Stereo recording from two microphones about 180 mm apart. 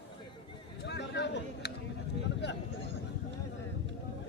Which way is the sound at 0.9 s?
70° left (ahead or behind).